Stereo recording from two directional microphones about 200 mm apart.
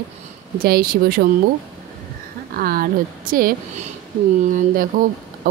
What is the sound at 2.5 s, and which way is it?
Speech, 45° right (ahead or behind).